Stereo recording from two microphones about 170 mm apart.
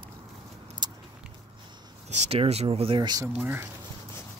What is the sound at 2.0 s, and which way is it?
Speech, 40° right (ahead or behind).